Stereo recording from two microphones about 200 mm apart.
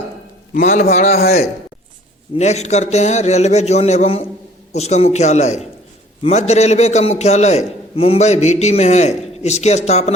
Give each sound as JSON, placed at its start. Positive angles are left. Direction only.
{"t": 0.5, "sound": "a man's voice", "side_deg": 40}
{"t": 1.1, "sound": "speech", "side_deg": 50}
{"t": 2.3, "sound": "a man's voice", "side_deg": 35}